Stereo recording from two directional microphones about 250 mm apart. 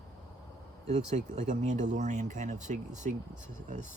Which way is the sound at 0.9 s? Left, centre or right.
Right.